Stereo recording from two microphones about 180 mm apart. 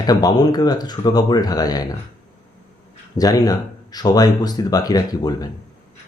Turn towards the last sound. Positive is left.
turn(degrees=20)  # may be behind; listen again after turning